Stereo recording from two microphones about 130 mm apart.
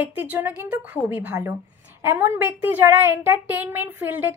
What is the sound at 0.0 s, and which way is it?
A woman's voice, 10° right (ahead or behind).